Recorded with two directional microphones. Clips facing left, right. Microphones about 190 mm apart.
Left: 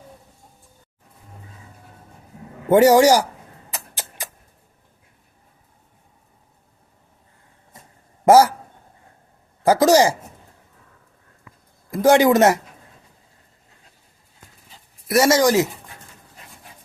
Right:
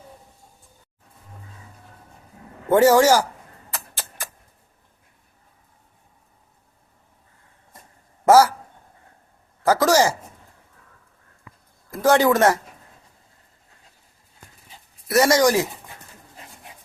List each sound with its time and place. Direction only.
2.6 s speech: 15° left (ahead or behind)
3.7 s music: 15° left (ahead or behind)
8.2 s a man's voice: 20° left (ahead or behind)
9.6 s speech: 15° left (ahead or behind)
11.9 s speech: 15° left (ahead or behind)
15.3 s speech: 20° left (ahead or behind)